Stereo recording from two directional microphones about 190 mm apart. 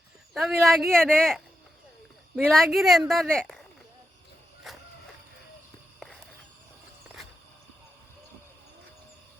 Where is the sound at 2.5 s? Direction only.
Centre (ahead or behind).